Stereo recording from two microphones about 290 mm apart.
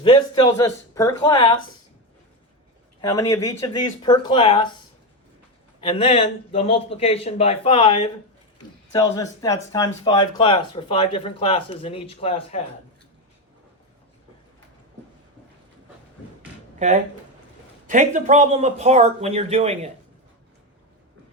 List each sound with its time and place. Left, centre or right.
0.0 s speech: centre
3.0 s speech: centre
5.8 s speech: centre
16.7 s speech: right